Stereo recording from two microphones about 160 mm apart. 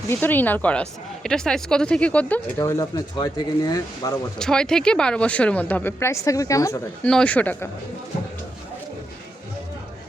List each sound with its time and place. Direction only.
0.1 s speech: 10° left (ahead or behind)
4.4 s speech: 5° left (ahead or behind); by 6.8 s 20° left (ahead or behind)
7.0 s speech: 5° left (ahead or behind)